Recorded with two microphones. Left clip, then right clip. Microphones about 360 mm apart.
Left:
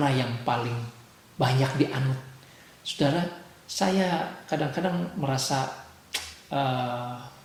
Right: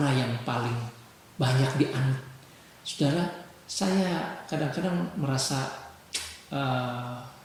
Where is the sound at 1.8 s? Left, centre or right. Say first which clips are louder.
Left 1 dB; left.